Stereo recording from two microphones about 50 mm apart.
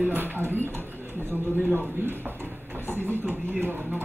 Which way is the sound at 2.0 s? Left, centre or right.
Right.